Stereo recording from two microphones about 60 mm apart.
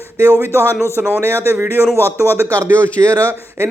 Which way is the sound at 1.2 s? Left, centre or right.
Right.